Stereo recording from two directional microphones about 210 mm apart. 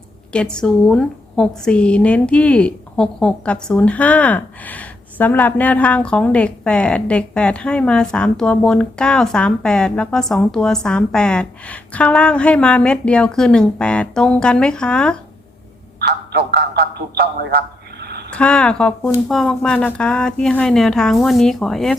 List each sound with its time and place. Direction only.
0.3 s a woman's voice: 5° left (ahead or behind)
16.0 s a man's voice: 50° right (ahead or behind)
18.0 s a sound: 50° right (ahead or behind)
18.3 s a woman's voice: 5° left (ahead or behind)